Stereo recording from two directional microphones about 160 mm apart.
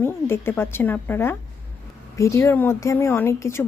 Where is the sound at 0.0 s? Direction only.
15° left (ahead or behind).